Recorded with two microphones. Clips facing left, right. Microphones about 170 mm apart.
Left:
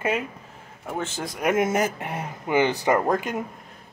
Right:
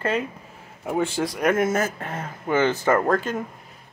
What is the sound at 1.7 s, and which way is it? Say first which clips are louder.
Speech: left 1 dB; 15° left (ahead or behind).